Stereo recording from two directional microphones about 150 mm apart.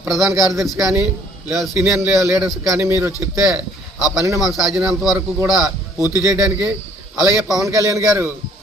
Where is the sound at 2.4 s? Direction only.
5° right (ahead or behind).